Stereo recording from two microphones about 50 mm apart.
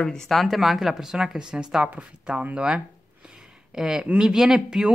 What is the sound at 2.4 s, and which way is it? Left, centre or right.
Speech, right.